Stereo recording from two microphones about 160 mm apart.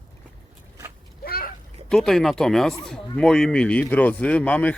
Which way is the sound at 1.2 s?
65° left (ahead or behind).